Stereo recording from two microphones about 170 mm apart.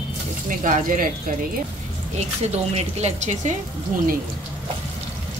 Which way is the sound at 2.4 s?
40° right (ahead or behind).